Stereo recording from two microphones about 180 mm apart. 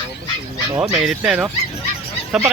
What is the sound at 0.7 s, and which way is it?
Speech, 5° right (ahead or behind).